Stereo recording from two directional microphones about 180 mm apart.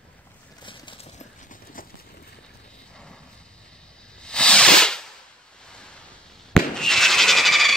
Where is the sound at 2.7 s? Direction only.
5° left (ahead or behind).